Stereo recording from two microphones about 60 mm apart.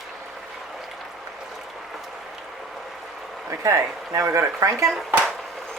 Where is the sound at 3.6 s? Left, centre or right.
Right.